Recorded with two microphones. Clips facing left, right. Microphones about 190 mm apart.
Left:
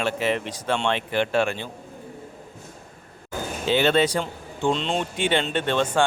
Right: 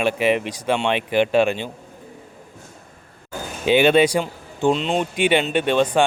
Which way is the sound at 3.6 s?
15° right (ahead or behind).